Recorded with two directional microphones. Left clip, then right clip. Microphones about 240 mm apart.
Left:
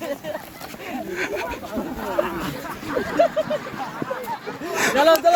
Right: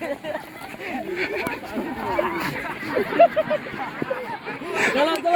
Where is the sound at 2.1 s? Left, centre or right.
Left.